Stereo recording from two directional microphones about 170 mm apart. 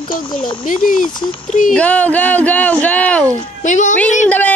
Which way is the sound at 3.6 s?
45° left (ahead or behind).